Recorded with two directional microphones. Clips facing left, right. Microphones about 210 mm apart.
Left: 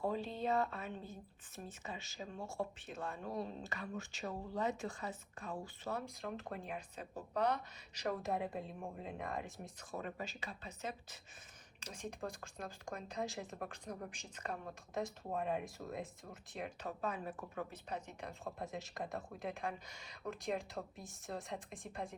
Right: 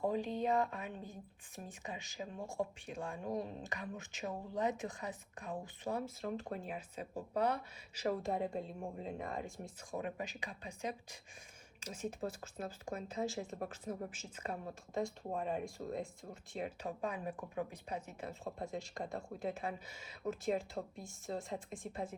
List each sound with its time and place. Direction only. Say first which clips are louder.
0.0 s a woman's voice: right 3 dB; 15° right (ahead or behind)
6.2 s speech: right 3 dB; centre (ahead or behind)
9.9 s a woman's voice: right 3 dB; 15° right (ahead or behind); by 22.1 s centre (ahead or behind)